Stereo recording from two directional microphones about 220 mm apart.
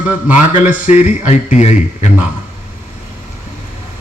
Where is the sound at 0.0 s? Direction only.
5° right (ahead or behind).